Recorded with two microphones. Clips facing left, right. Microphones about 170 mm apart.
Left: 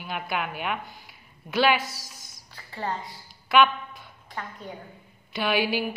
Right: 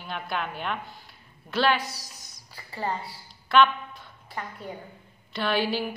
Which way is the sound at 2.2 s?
5° right (ahead or behind).